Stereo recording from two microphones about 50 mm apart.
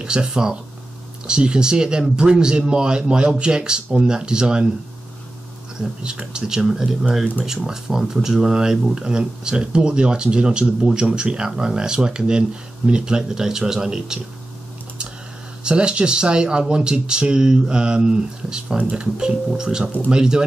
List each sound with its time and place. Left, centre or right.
0.0 s speech: centre
5.8 s speech: centre
15.6 s speech: centre
18.8 s speech: right
19.1 s speech: centre